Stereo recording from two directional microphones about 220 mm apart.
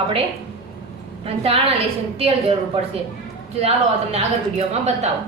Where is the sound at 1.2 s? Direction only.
25° right (ahead or behind).